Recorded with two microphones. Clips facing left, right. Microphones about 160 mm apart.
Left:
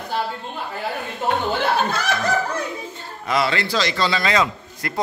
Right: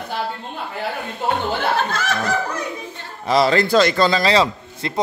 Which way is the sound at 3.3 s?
35° right (ahead or behind).